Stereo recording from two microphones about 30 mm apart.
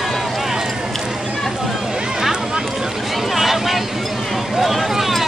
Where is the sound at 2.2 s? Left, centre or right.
Centre.